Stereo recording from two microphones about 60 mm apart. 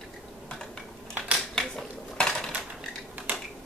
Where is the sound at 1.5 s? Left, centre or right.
Centre.